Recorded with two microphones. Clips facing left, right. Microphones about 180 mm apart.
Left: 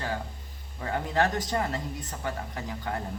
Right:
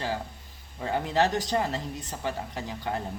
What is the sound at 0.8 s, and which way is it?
Speech, 20° right (ahead or behind).